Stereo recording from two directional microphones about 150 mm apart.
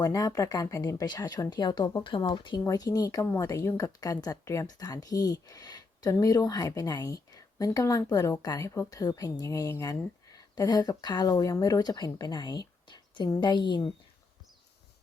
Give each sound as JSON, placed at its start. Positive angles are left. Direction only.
{"t": 0.0, "sound": "speech", "side_deg": 25}